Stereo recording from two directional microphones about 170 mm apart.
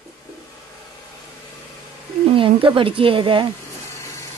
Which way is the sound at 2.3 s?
30° right (ahead or behind).